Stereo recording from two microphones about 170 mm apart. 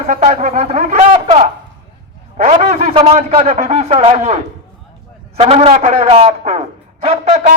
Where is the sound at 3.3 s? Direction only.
40° right (ahead or behind).